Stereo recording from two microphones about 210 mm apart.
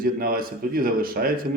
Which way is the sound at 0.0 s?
45° right (ahead or behind).